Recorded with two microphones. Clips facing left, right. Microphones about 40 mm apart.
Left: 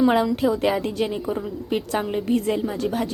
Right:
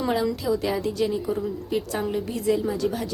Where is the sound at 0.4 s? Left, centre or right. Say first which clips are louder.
Left 4 dB; left.